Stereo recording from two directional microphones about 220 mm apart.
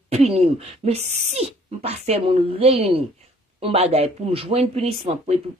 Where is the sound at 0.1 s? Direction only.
25° right (ahead or behind).